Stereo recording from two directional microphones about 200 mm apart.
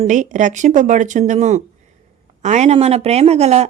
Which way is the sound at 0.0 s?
40° right (ahead or behind).